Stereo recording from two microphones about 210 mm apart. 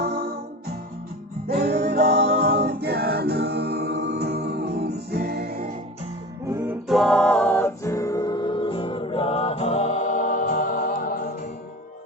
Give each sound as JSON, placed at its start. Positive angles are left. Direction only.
{"t": 0.0, "sound": "music", "side_deg": -50}
{"t": 1.5, "sound": "music", "side_deg": -45}
{"t": 6.5, "sound": "music", "side_deg": -10}